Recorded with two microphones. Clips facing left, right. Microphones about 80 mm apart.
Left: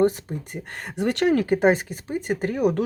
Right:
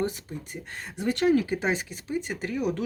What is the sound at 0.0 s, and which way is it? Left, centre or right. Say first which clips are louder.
Speech: left 9 dB; left.